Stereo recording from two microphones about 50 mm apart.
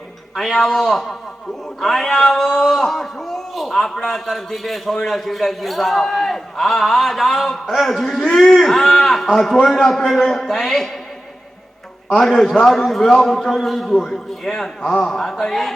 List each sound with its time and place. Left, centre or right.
0.3 s speech: centre
12.2 s a man's voice: centre